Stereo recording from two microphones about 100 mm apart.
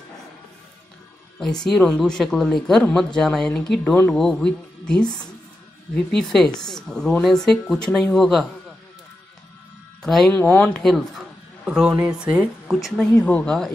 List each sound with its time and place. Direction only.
1.4 s a woman's voice: 5° left (ahead or behind)
6.1 s a woman's voice: 5° left (ahead or behind)
10.0 s a woman's voice: centre (ahead or behind)
10.3 s speech: 20° left (ahead or behind)
10.7 s a woman's voice: 5° left (ahead or behind)
11.6 s speech: 5° right (ahead or behind)
13.2 s speech: 15° left (ahead or behind)